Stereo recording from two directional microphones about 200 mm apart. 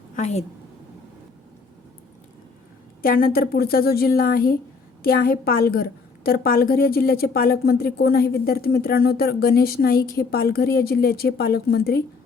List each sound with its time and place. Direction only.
0.2 s a woman's voice: 35° left (ahead or behind)
3.0 s a woman's voice: 45° left (ahead or behind)